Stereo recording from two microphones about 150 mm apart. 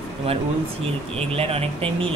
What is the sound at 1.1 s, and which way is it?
Speech, 40° right (ahead or behind).